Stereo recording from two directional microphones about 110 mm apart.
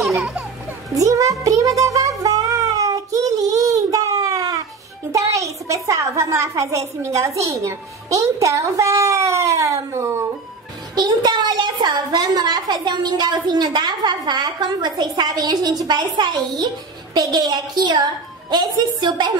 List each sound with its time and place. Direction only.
0.0 s music: 10° right (ahead or behind)
0.9 s a sound: 30° right (ahead or behind)
5.1 s a child's voice: 30° right (ahead or behind)
11.0 s a child's voice: 40° right (ahead or behind)